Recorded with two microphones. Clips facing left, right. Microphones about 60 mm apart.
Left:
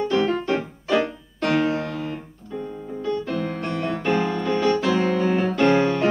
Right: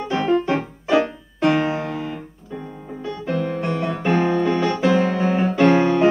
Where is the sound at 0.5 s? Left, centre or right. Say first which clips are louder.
Right 2 dB; centre.